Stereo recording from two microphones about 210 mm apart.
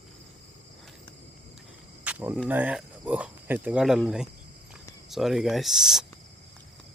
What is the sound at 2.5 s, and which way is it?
Speech, 5° right (ahead or behind).